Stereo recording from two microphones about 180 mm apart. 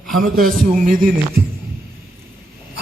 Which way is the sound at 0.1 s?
55° right (ahead or behind).